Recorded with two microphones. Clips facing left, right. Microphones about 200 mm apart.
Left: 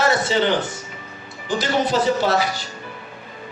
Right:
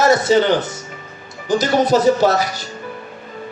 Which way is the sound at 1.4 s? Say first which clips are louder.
Right 5 dB; 40° right (ahead or behind).